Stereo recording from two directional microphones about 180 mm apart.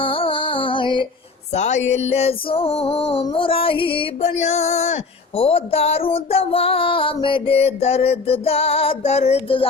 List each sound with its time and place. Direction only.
0.0 s music: 30° left (ahead or behind)
1.5 s child singing: 40° left (ahead or behind)